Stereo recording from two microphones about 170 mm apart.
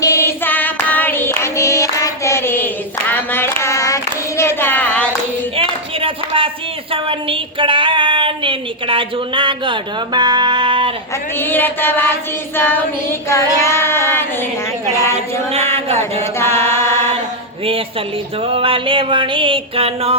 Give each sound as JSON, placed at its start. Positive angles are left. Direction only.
{"t": 0.0, "sound": "hands", "side_deg": 15}
{"t": 3.1, "sound": "child singing", "side_deg": 15}
{"t": 5.5, "sound": "a sound", "side_deg": -30}
{"t": 11.3, "sound": "chant", "side_deg": 10}
{"t": 13.2, "sound": "child singing", "side_deg": 15}
{"t": 15.5, "sound": "a sound", "side_deg": -35}
{"t": 16.2, "sound": "chant", "side_deg": 15}
{"t": 18.4, "sound": "music", "side_deg": -30}